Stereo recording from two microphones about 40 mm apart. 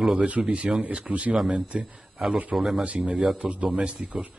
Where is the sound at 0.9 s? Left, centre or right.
Right.